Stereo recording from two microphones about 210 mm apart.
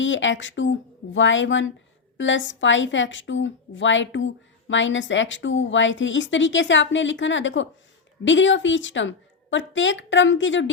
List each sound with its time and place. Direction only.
0.0 s a woman's voice: 60° left (ahead or behind)